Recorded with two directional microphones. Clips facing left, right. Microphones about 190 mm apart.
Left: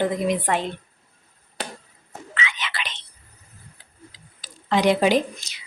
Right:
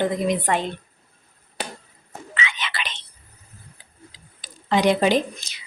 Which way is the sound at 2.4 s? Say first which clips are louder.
Right 1 dB; 25° right (ahead or behind).